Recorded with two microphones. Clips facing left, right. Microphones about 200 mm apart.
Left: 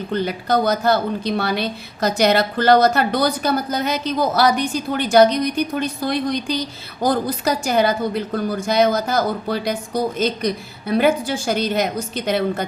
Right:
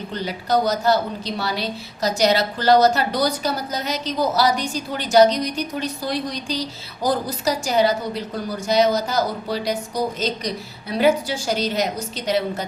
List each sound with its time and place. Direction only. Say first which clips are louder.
0.1 s a woman's voice: left 2 dB; 55° left (ahead or behind)